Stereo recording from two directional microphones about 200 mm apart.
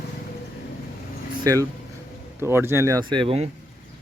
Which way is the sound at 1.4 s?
15° right (ahead or behind).